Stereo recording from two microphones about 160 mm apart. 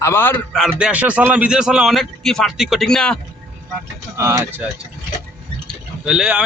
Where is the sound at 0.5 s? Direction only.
5° right (ahead or behind).